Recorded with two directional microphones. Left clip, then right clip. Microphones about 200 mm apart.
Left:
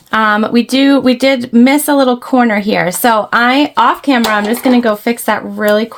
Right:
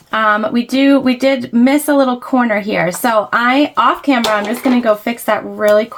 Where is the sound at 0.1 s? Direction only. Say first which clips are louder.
Left 2 dB; 50° left (ahead or behind).